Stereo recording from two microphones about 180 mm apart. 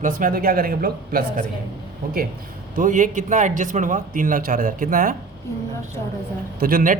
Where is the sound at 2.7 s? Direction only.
45° right (ahead or behind).